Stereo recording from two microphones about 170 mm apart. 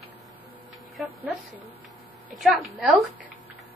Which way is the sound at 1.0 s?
Centre (ahead or behind).